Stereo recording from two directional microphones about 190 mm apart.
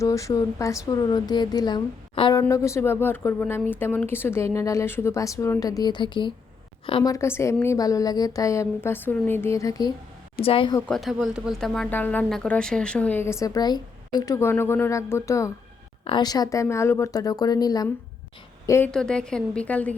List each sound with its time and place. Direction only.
0.0 s speech: 15° left (ahead or behind)
10.8 s speech: 5° left (ahead or behind)
18.9 s a woman's voice: 5° left (ahead or behind)